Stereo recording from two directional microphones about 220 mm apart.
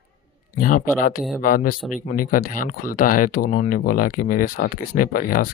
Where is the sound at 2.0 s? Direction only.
35° left (ahead or behind).